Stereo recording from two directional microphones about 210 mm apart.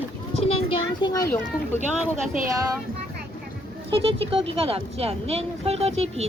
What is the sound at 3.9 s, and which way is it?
Speech, 25° right (ahead or behind).